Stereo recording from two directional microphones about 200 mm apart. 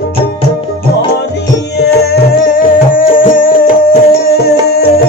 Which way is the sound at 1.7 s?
50° left (ahead or behind).